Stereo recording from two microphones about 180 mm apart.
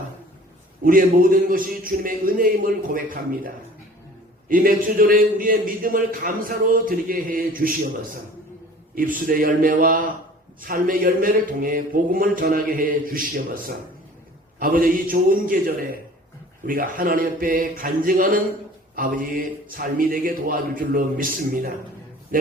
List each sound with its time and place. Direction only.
0.9 s a man's voice: 50° right (ahead or behind)
4.4 s a man's voice: 50° right (ahead or behind)
9.0 s a man's voice: 50° right (ahead or behind)